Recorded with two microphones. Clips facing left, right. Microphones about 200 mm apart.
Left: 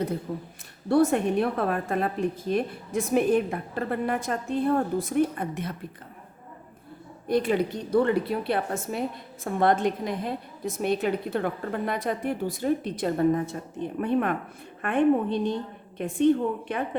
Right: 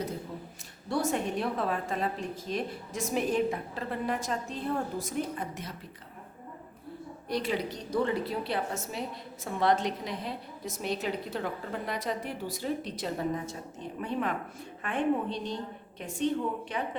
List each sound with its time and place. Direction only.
0.9 s a woman's voice: 55° left (ahead or behind)
7.3 s a woman's voice: 50° left (ahead or behind)